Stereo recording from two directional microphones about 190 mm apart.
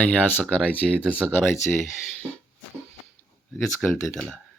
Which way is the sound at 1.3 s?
15° left (ahead or behind).